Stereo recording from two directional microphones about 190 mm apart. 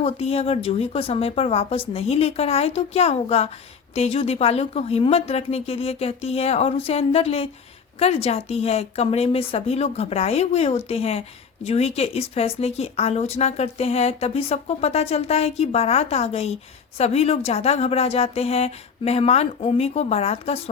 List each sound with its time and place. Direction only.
0.0 s speech: 30° left (ahead or behind)